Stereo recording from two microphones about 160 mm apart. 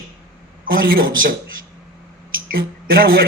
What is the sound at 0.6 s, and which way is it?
Speech, 65° right (ahead or behind).